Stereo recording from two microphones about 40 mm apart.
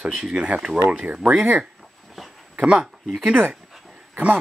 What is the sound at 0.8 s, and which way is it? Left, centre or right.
Speech, right.